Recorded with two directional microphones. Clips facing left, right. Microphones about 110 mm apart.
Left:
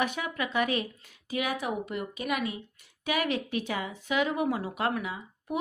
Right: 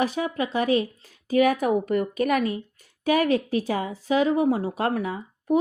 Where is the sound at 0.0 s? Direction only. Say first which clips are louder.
Right 6 dB; 35° right (ahead or behind).